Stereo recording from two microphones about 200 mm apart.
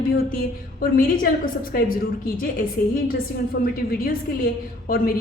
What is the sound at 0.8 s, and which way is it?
Speech, 45° left (ahead or behind).